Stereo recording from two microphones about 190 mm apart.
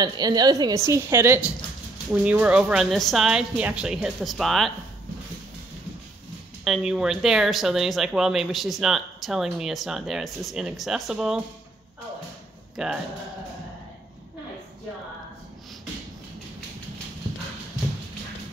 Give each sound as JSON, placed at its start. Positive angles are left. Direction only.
{"t": 0.0, "sound": "a woman's voice", "side_deg": -20}
{"t": 6.6, "sound": "speech", "side_deg": -5}
{"t": 12.7, "sound": "speech", "side_deg": -5}